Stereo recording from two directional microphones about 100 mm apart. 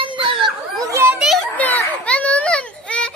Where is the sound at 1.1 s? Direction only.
Centre (ahead or behind).